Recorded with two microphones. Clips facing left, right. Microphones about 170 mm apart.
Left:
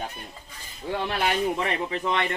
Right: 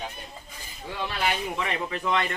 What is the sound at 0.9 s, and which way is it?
Speech, 55° left (ahead or behind).